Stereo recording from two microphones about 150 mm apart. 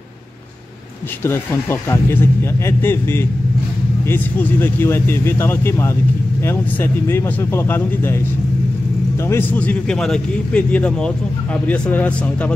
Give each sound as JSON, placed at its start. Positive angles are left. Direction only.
{"t": 1.2, "sound": "a man's voice", "side_deg": 15}